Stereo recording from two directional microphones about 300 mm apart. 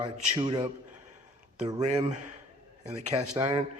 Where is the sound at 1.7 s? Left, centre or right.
Centre.